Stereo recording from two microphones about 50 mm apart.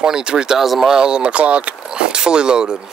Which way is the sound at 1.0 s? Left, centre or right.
Right.